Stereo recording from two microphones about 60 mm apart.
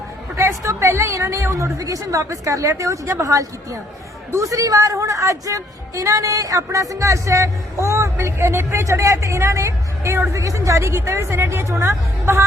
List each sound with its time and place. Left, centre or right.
0.3 s a woman's voice: right
10.3 s a woman's voice: right